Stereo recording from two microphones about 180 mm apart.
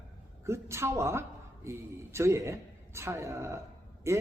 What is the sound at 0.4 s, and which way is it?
Speech, 15° right (ahead or behind).